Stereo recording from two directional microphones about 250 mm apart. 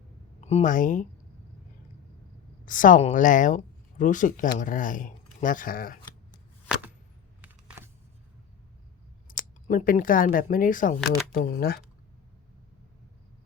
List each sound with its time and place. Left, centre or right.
0.4 s speech: left
2.6 s speech: left
7.4 s a sound: centre
9.2 s speech: left